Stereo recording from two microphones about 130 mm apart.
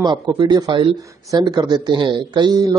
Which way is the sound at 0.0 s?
35° right (ahead or behind).